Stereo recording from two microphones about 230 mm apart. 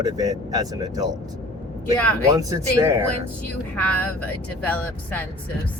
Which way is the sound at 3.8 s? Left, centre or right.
Centre.